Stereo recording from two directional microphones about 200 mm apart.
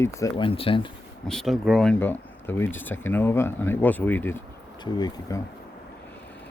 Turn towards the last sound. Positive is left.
turn(degrees=20)  # may be behind; listen again after turning